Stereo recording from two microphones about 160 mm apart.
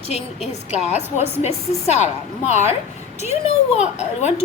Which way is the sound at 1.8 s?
45° left (ahead or behind).